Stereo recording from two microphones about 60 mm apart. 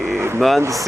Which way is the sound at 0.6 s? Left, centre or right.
Right.